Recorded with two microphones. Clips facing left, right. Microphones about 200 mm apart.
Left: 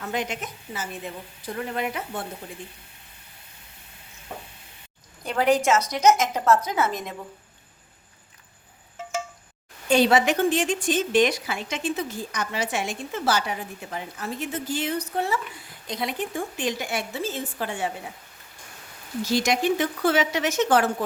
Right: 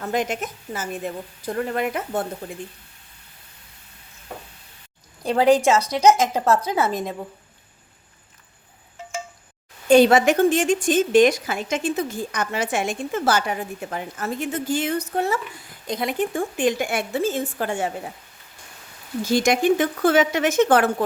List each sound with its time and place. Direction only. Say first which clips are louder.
0.0 s a woman's voice: right 5 dB; 45° right (ahead or behind)
5.2 s a woman's voice: right 5 dB; 30° right (ahead or behind)
9.9 s a woman's voice: right 5 dB; 50° right (ahead or behind)
19.2 s a woman's voice: right 4 dB; 50° right (ahead or behind)